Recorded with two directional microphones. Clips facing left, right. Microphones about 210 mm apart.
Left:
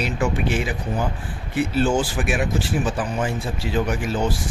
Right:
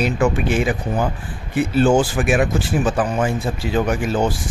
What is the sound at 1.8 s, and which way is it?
Speech, 50° right (ahead or behind).